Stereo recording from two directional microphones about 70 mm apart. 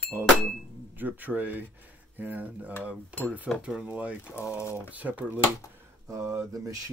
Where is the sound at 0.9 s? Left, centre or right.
Right.